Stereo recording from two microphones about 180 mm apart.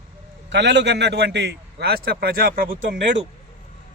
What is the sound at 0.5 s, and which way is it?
A man's voice, 75° right (ahead or behind).